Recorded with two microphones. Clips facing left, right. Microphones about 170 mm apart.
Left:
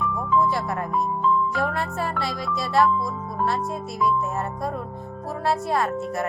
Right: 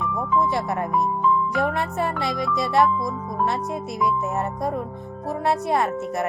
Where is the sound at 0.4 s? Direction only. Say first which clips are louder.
Right 1 dB; 20° right (ahead or behind).